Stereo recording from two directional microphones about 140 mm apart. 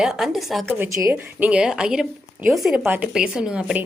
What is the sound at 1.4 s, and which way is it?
A woman's voice, 5° right (ahead or behind).